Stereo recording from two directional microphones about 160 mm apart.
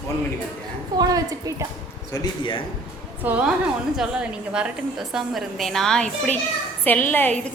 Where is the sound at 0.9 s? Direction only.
25° right (ahead or behind).